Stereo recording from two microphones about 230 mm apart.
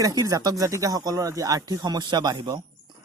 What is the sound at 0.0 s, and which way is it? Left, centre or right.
Speech, centre.